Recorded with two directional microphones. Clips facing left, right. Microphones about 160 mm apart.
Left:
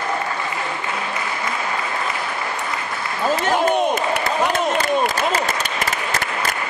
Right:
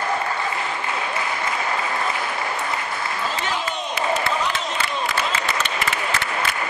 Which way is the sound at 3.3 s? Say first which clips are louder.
Left 12 dB; 50° left (ahead or behind).